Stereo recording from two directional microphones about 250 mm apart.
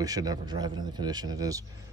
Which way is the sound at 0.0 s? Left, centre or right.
Centre.